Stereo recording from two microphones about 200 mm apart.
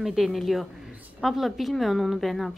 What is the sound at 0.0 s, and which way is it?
A woman's voice, centre (ahead or behind).